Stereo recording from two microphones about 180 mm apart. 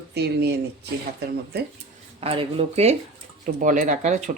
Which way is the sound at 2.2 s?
30° right (ahead or behind).